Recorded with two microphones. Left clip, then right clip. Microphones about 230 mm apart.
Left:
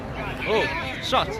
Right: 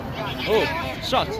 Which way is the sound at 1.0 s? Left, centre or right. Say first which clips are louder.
Even; centre.